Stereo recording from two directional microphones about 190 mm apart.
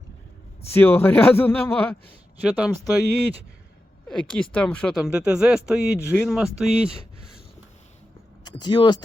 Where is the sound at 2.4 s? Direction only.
5° right (ahead or behind).